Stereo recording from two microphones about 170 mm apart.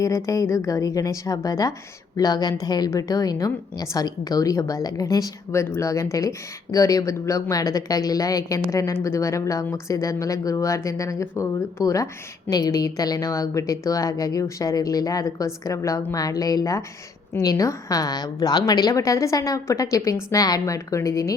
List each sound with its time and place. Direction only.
0.0 s a woman's voice: 20° left (ahead or behind)